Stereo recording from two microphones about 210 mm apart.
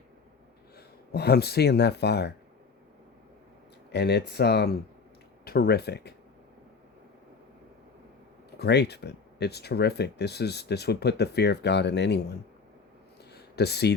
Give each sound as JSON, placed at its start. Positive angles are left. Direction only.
{"t": 0.8, "sound": "speech", "side_deg": 50}
{"t": 3.9, "sound": "speech", "side_deg": 50}
{"t": 8.5, "sound": "speech", "side_deg": 50}
{"t": 13.3, "sound": "a sound", "side_deg": 50}